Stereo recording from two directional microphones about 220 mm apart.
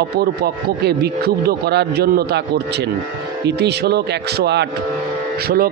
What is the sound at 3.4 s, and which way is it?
A man's voice, 50° right (ahead or behind).